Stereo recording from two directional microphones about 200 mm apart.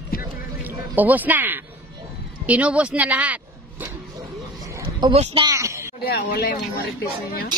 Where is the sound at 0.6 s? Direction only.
10° right (ahead or behind).